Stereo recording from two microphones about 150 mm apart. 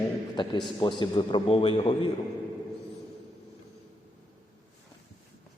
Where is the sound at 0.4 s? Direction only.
30° left (ahead or behind).